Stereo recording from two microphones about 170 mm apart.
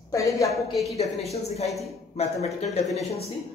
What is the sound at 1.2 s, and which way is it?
Speech, 40° left (ahead or behind).